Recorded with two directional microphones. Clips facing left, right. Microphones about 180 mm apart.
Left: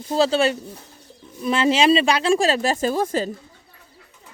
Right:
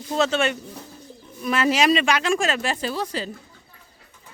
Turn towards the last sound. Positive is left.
turn(degrees=45)  # may be behind; listen again after turning